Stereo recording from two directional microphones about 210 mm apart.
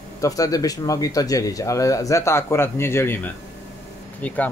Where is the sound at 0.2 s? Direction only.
15° left (ahead or behind).